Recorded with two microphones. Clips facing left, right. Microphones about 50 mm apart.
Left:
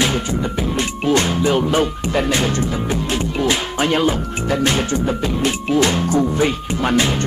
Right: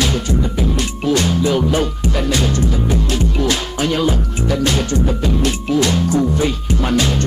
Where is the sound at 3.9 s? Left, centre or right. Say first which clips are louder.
Even; left.